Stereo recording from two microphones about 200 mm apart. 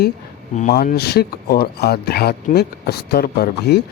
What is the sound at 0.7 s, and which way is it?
Speech, 50° left (ahead or behind).